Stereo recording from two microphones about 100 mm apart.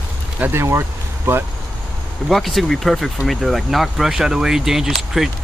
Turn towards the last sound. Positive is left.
turn(degrees=-5)  # may be behind; listen again after turning